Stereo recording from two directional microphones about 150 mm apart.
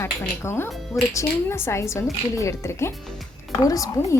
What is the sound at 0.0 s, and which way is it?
Music, 15° left (ahead or behind).